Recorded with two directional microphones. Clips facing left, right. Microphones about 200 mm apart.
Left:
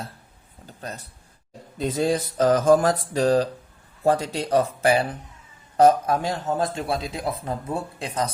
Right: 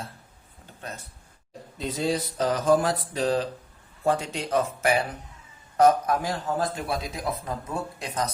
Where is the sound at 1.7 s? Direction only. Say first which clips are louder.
Left 4 dB; 50° left (ahead or behind).